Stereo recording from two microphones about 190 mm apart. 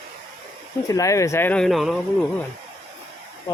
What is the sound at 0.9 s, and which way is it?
Speech, 15° left (ahead or behind).